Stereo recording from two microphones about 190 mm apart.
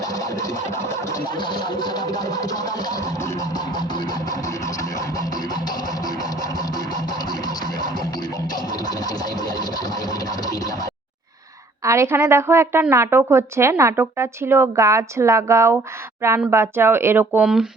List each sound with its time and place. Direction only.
0.0 s music: 20° left (ahead or behind)
11.8 s a woman's voice: 15° right (ahead or behind)